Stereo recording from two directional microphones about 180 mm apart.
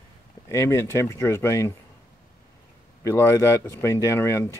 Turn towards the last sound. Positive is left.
turn(degrees=15)  # may be behind; listen again after turning